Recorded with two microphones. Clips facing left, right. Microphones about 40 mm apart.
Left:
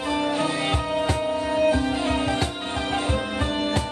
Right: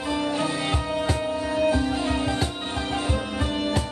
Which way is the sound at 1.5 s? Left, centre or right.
Left.